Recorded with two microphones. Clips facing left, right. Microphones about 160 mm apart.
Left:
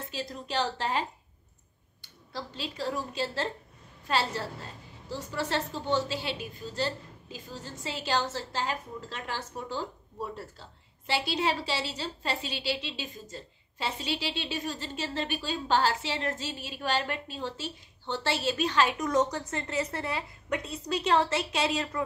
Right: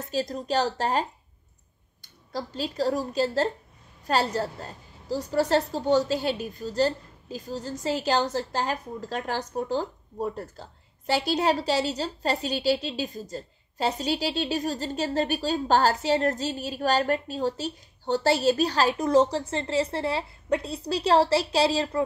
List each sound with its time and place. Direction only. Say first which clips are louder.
0.0 s a woman's voice: right 8 dB; 40° right (ahead or behind)